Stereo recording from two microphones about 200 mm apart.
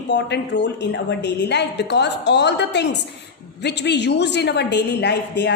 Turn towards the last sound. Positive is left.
turn(degrees=60)  # may be behind; listen again after turning